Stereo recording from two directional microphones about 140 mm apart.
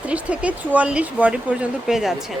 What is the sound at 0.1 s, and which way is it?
Speech, 10° right (ahead or behind).